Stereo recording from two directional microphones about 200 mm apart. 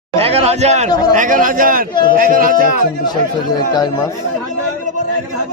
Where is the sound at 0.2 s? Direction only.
30° right (ahead or behind).